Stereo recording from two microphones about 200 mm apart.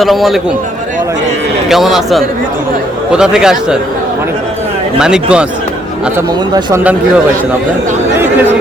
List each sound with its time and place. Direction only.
0.0 s speech: centre (ahead or behind)
1.7 s speech: centre (ahead or behind)
4.9 s speech: 5° right (ahead or behind)
6.1 s speech: 15° right (ahead or behind)